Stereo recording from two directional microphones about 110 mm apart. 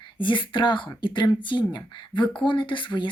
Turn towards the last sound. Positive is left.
turn(degrees=45)  # may be behind; listen again after turning